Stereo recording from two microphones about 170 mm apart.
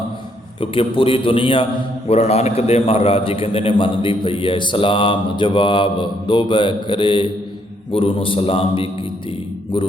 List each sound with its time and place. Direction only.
0.6 s a man's voice: 30° left (ahead or behind)